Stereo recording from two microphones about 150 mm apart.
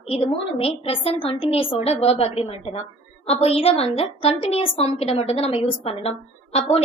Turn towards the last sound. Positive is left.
turn(degrees=40)  # may be behind; listen again after turning